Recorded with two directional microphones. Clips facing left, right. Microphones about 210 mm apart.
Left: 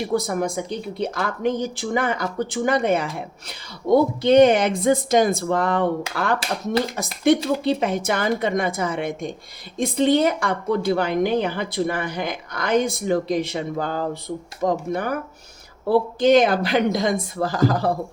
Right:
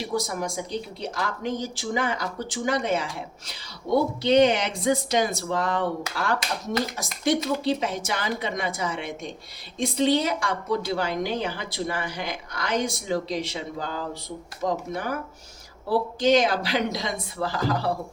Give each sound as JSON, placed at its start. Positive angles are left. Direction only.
{"t": 0.0, "sound": "a woman's voice", "side_deg": 60}
{"t": 7.3, "sound": "a woman's voice", "side_deg": 60}